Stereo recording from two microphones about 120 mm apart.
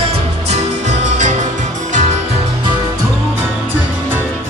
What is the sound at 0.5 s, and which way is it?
Music, 70° right (ahead or behind).